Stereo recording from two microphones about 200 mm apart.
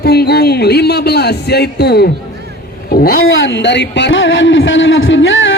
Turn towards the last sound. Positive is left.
turn(degrees=70)  # may be behind; listen again after turning